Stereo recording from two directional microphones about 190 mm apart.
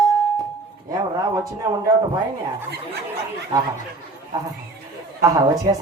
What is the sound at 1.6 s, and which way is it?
Speech, 15° right (ahead or behind).